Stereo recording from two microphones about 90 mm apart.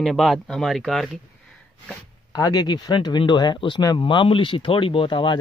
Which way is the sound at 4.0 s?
70° left (ahead or behind).